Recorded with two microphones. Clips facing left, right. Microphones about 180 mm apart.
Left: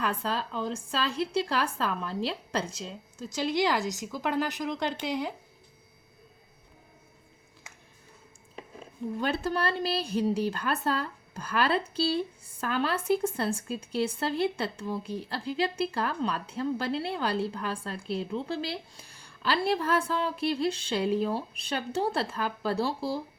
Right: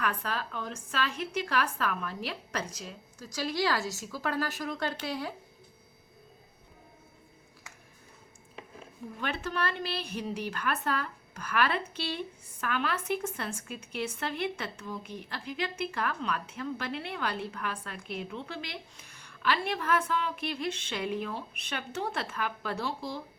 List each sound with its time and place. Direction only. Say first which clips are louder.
0.0 s a woman's voice: left 3 dB; 25° left (ahead or behind)
9.1 s speech: left 4 dB; 30° left (ahead or behind)